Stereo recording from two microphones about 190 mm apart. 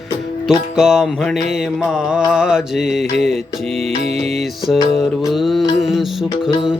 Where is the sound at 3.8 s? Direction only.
35° right (ahead or behind).